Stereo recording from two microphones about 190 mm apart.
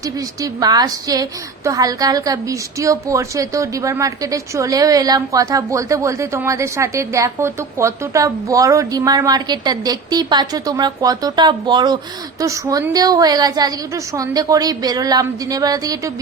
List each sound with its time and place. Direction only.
0.0 s a woman's voice: 20° right (ahead or behind)